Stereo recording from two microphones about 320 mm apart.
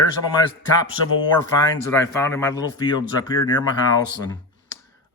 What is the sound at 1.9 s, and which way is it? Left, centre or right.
Speech, centre.